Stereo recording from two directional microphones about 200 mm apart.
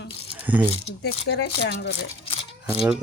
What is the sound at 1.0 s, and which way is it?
Speech, 55° left (ahead or behind).